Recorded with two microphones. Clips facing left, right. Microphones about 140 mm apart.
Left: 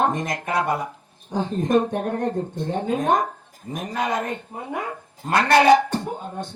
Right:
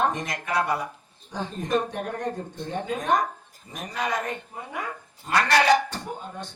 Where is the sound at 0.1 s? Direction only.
50° left (ahead or behind).